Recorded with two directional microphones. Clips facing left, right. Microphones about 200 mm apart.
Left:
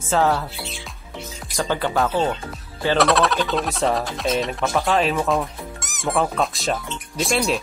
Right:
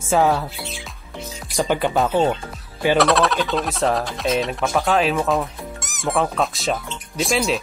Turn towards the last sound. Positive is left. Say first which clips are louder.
# right 1 dB
turn(degrees=0)  # may be behind; listen again after turning